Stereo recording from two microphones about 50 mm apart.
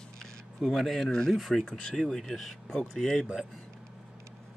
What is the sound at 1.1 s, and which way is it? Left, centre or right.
Speech, centre.